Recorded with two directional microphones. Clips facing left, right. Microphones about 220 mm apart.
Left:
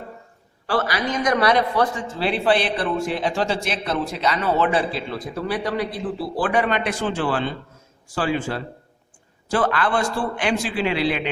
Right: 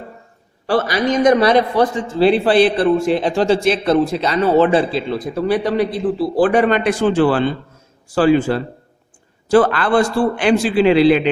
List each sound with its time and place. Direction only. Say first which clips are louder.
0.7 s a man's voice: right 6 dB; 20° right (ahead or behind)
2.2 s a man's voice: right 8 dB; 35° right (ahead or behind)
6.4 s a man's voice: right 8 dB; 35° right (ahead or behind)